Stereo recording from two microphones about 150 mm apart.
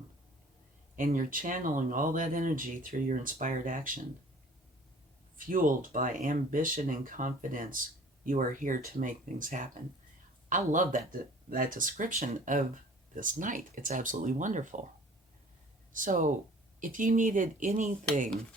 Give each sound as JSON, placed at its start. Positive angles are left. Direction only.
{"t": 0.9, "sound": "speech", "side_deg": -65}
{"t": 5.4, "sound": "speech", "side_deg": -65}
{"t": 15.9, "sound": "speech", "side_deg": -65}